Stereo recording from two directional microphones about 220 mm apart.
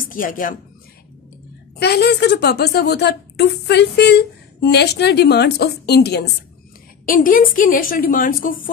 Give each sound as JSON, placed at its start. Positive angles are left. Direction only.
{"t": 0.1, "sound": "a woman's voice", "side_deg": 40}
{"t": 1.8, "sound": "a woman's voice", "side_deg": 50}